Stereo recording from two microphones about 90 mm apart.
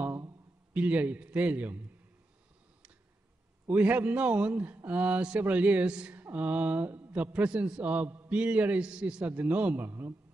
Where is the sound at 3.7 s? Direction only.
15° right (ahead or behind).